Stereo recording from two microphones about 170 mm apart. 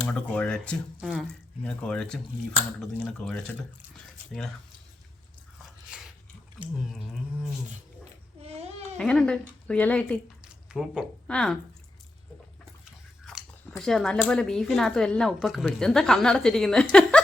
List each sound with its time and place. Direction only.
0.1 s speech: 5° left (ahead or behind)
8.4 s babbling: 40° right (ahead or behind)
9.0 s a woman's voice: 5° left (ahead or behind)
10.4 s drip: 5° right (ahead or behind)
11.3 s speech: 5° left (ahead or behind)
12.8 s speech: centre (ahead or behind)
16.9 s chuckle: 5° left (ahead or behind)